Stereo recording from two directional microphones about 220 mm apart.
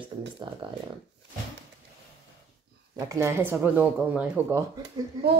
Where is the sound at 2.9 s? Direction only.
15° right (ahead or behind).